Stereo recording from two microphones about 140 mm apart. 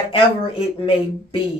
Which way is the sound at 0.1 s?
40° left (ahead or behind).